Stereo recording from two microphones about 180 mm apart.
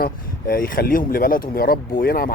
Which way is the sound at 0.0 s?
55° left (ahead or behind).